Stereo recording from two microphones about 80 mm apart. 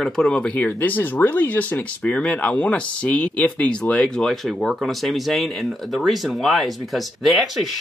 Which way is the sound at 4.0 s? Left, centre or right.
Centre.